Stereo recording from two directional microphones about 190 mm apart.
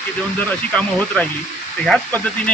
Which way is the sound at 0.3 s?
5° left (ahead or behind).